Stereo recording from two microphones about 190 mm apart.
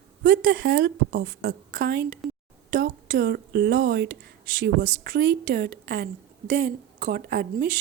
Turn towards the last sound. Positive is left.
turn(degrees=-55)  # may be behind; listen again after turning